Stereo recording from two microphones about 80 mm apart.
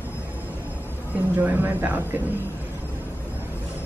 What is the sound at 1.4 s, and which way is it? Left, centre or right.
Speech, right.